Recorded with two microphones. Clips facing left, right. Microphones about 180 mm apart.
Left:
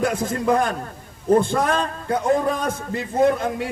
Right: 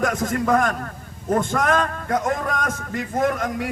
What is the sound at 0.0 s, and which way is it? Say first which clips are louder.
A man's voice: left 1 dB; 30° left (ahead or behind).